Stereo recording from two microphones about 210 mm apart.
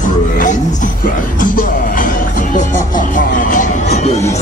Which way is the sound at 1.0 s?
40° left (ahead or behind).